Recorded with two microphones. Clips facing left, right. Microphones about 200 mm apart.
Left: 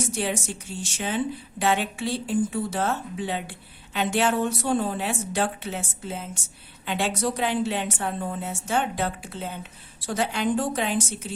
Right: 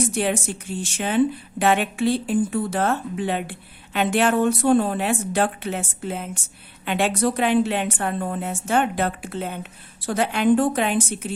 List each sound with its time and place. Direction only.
0.1 s speech: 55° right (ahead or behind)